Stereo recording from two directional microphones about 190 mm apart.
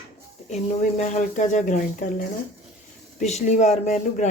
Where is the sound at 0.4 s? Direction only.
35° left (ahead or behind).